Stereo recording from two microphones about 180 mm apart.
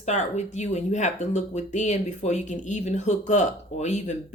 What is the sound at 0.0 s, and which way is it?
Speech, 40° left (ahead or behind).